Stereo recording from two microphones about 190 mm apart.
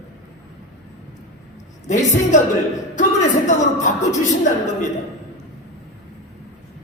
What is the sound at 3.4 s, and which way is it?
Speech, 40° left (ahead or behind).